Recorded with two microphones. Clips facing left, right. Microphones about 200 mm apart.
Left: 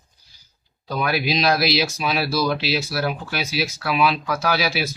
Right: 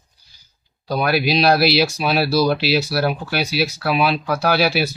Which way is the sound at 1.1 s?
70° right (ahead or behind).